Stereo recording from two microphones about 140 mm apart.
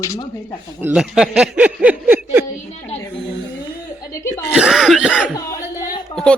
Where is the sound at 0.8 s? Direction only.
5° right (ahead or behind).